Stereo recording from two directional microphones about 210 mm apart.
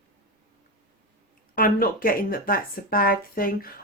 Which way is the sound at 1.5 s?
45° left (ahead or behind).